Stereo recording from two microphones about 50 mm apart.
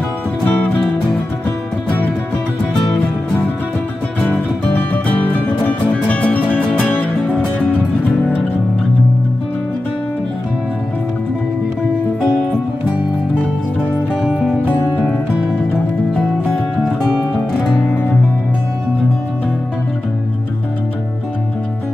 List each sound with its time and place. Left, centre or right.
0.5 s music: left
4.2 s music: left